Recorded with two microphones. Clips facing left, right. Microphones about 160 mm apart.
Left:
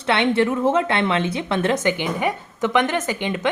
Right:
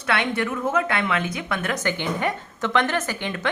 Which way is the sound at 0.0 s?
25° left (ahead or behind).